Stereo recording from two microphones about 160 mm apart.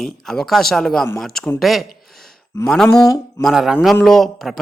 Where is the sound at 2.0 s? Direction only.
Centre (ahead or behind).